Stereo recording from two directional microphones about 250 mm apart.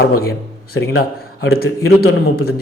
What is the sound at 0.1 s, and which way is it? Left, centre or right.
A man's voice, left.